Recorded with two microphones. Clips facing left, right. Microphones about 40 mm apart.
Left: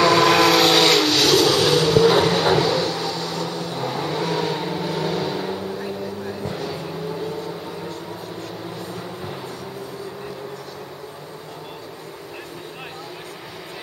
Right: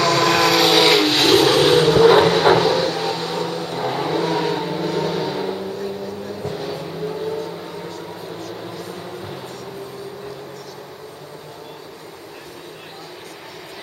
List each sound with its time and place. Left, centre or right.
0.0 s vehicle: centre
1.1 s vehicle: right
2.8 s cupboard open or close: right
3.4 s vehicle: centre